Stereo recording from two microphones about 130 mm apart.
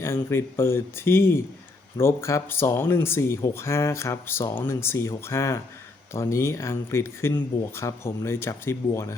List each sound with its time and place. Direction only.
0.0 s speech: 20° left (ahead or behind)